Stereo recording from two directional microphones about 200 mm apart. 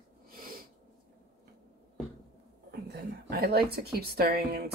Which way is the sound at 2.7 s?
50° right (ahead or behind).